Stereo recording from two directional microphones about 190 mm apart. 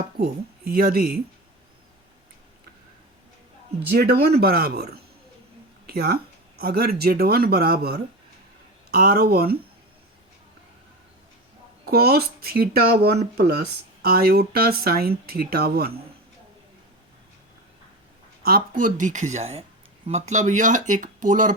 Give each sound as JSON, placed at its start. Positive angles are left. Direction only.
{"t": 0.2, "sound": "speech", "side_deg": -50}
{"t": 3.9, "sound": "speech", "side_deg": -55}
{"t": 5.8, "sound": "a sound", "side_deg": -55}
{"t": 6.6, "sound": "speech", "side_deg": -55}
{"t": 11.9, "sound": "speech", "side_deg": -55}
{"t": 18.8, "sound": "speech", "side_deg": -45}